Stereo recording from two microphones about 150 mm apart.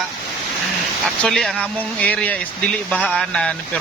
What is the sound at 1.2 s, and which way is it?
Speech, 5° left (ahead or behind).